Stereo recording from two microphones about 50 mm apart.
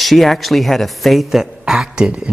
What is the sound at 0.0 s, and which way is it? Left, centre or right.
Speech, centre.